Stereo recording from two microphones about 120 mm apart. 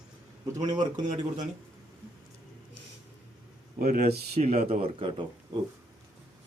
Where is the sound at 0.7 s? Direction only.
35° right (ahead or behind).